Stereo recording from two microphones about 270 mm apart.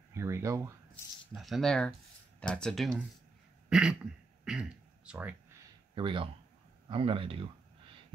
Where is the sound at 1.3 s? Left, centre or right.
Centre.